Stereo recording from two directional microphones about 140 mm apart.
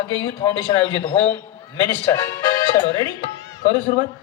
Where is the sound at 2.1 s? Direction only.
20° left (ahead or behind).